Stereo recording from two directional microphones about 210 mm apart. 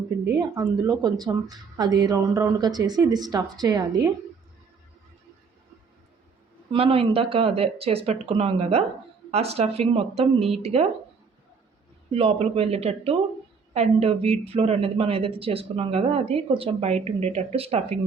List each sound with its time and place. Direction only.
0.3 s speech: 15° right (ahead or behind)
6.7 s speech: 25° right (ahead or behind)
12.1 s speech: 30° right (ahead or behind)